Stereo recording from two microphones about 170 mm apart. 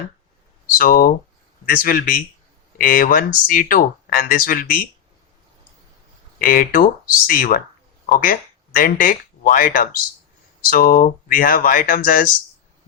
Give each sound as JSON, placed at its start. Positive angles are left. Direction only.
{"t": 0.8, "sound": "speech", "side_deg": 55}
{"t": 6.4, "sound": "speech", "side_deg": 55}